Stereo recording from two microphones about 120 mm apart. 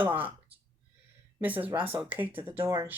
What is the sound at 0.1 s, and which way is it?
Speech, 15° right (ahead or behind).